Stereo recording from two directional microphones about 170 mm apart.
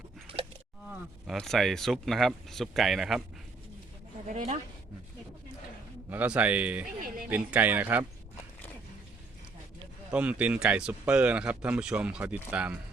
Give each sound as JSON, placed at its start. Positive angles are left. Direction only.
{"t": 0.3, "sound": "a sound", "side_deg": -30}
{"t": 0.9, "sound": "speech", "side_deg": -5}
{"t": 4.3, "sound": "speech", "side_deg": -45}
{"t": 6.1, "sound": "speech", "side_deg": -10}
{"t": 10.1, "sound": "speech", "side_deg": -10}